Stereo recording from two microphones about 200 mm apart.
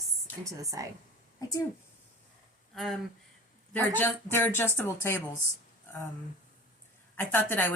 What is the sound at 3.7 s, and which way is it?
Speech, 10° left (ahead or behind).